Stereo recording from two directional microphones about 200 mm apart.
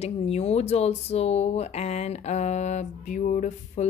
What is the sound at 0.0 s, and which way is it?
A woman's voice, 30° left (ahead or behind).